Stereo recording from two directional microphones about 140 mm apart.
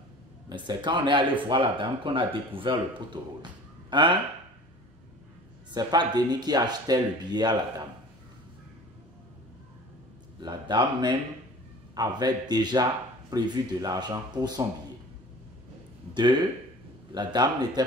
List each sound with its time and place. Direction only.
0.5 s speech: 35° right (ahead or behind)
5.7 s speech: 30° right (ahead or behind)
10.4 s speech: 30° right (ahead or behind)
17.1 s speech: 30° right (ahead or behind)